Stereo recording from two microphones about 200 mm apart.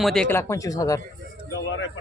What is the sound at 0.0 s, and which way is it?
Speech, centre (ahead or behind).